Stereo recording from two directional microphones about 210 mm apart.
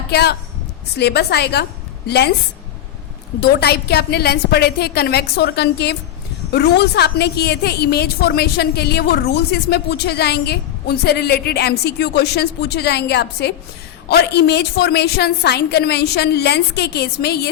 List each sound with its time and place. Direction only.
0.1 s a woman's voice: 50° left (ahead or behind)
3.4 s a woman's voice: 50° left (ahead or behind)